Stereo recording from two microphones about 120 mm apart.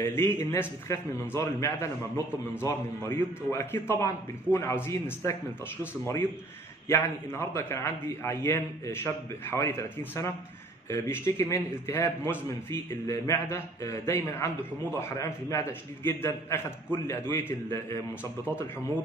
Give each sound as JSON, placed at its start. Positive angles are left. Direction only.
{"t": 0.0, "sound": "a man's voice", "side_deg": 20}
{"t": 6.9, "sound": "a man's voice", "side_deg": 20}